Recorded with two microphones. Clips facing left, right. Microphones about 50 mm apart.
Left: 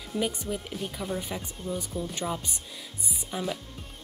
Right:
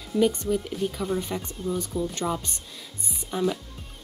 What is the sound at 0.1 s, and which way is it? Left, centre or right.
Speech, centre.